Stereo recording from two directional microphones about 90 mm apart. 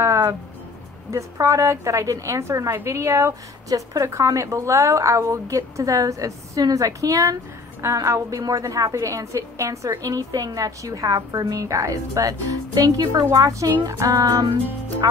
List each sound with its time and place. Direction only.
0.0 s music: 35° right (ahead or behind)
1.1 s a woman's voice: 35° right (ahead or behind)